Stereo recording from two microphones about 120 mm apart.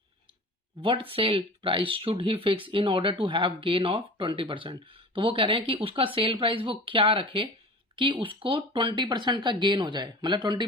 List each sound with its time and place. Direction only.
0.8 s speech: 45° right (ahead or behind)